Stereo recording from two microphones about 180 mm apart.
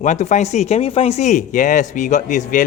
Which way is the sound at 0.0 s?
40° left (ahead or behind).